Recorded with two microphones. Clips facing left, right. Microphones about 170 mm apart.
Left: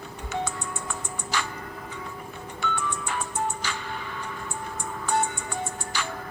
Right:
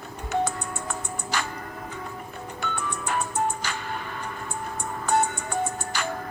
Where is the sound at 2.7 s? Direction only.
45° right (ahead or behind).